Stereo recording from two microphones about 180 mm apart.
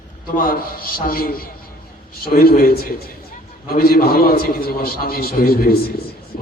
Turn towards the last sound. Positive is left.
turn(degrees=60)  # may be behind; listen again after turning